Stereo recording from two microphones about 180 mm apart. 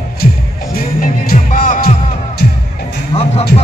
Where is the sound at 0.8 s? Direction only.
55° left (ahead or behind).